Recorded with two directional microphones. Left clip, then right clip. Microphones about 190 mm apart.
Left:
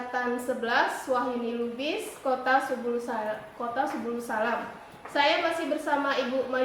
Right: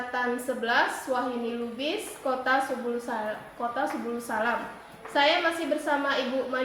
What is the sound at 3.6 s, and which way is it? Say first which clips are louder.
A woman's voice: right 1 dB; centre (ahead or behind).